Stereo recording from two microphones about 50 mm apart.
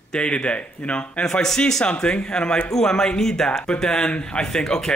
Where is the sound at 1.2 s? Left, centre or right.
Centre.